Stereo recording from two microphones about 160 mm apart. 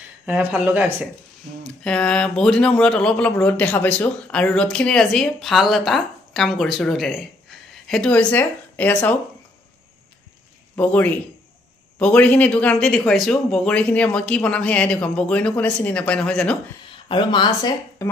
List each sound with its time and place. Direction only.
0.3 s speech: 10° right (ahead or behind)
1.6 s speech: 5° left (ahead or behind)
10.8 s speech: 10° left (ahead or behind)
17.1 s speech: 30° left (ahead or behind)